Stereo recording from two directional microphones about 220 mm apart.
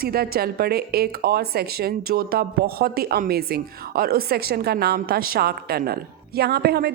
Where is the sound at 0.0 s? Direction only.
45° right (ahead or behind).